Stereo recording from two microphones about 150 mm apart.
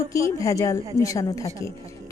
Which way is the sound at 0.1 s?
20° left (ahead or behind).